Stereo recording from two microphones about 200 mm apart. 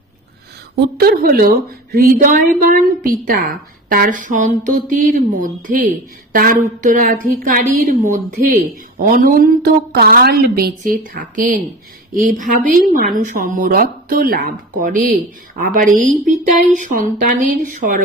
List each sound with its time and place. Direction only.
0.9 s a woman's voice: 50° right (ahead or behind)